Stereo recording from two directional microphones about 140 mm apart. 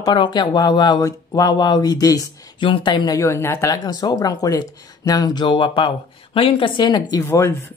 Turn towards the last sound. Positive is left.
turn(degrees=15)  # may be behind; listen again after turning